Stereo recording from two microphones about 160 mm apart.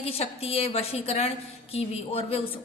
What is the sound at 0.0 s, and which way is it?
A man's voice, 40° left (ahead or behind).